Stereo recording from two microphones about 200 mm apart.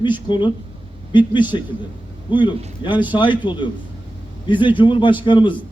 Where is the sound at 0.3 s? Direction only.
25° left (ahead or behind).